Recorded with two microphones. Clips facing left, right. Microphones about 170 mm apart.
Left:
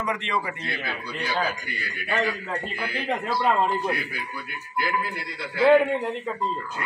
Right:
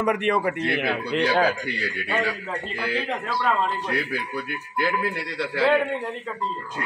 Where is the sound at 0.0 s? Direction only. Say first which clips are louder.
Right 6 dB; 60° right (ahead or behind); by 1.9 s 85° right.